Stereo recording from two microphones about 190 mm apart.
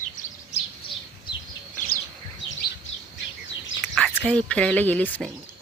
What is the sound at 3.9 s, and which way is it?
Speech, 10° left (ahead or behind).